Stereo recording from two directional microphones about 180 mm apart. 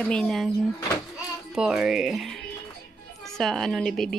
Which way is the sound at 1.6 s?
5° right (ahead or behind).